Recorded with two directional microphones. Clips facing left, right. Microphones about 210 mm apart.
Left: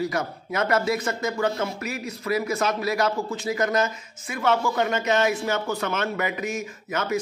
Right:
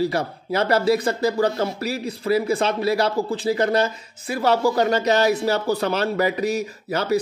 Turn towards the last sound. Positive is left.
turn(degrees=-35)  # may be behind; listen again after turning